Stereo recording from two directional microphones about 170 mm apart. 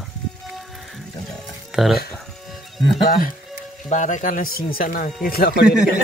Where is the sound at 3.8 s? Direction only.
45° left (ahead or behind); by 5.6 s 60° left (ahead or behind).